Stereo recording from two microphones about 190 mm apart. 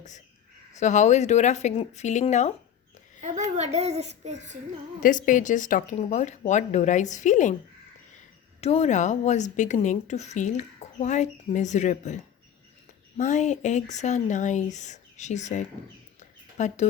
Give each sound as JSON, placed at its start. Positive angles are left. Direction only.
{"t": 0.8, "sound": "a woman's voice", "side_deg": 40}
{"t": 3.2, "sound": "a sound", "side_deg": -40}
{"t": 3.5, "sound": "a child's voice", "side_deg": -35}
{"t": 5.0, "sound": "a woman's voice", "side_deg": 45}
{"t": 8.6, "sound": "a woman's voice", "side_deg": 35}